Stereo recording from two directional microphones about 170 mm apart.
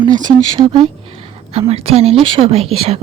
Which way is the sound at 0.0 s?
25° right (ahead or behind).